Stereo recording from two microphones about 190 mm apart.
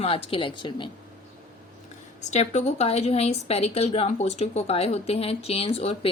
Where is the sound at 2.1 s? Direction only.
35° left (ahead or behind).